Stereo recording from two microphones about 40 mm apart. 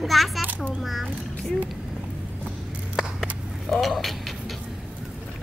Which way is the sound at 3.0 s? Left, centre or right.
Centre.